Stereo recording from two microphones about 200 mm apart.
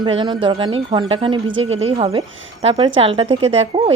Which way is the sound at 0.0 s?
25° right (ahead or behind).